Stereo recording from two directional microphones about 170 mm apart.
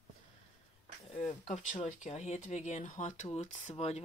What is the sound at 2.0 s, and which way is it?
Speech, 40° left (ahead or behind).